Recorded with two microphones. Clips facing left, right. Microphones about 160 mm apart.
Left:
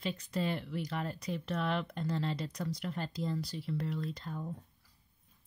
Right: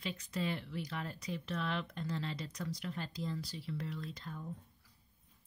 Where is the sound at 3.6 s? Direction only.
50° left (ahead or behind).